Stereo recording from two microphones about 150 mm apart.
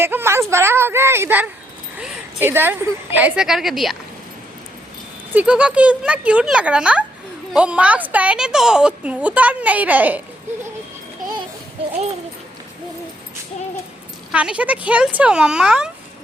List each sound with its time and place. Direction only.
0.0 s a woman's voice: 15° right (ahead or behind)
5.3 s speech: 10° right (ahead or behind)
14.3 s speech: 10° right (ahead or behind)